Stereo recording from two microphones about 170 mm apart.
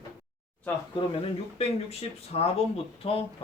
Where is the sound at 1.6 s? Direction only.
35° left (ahead or behind).